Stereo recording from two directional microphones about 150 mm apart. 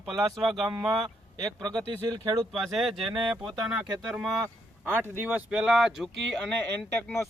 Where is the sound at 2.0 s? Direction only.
25° right (ahead or behind).